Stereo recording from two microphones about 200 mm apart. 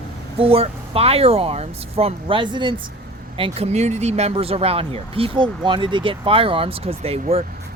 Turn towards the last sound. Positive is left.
turn(degrees=-30)  # may be behind; listen again after turning